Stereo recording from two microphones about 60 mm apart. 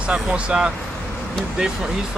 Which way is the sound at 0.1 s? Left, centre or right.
Centre.